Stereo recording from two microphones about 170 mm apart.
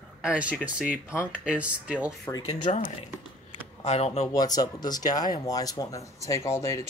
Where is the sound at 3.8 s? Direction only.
40° left (ahead or behind).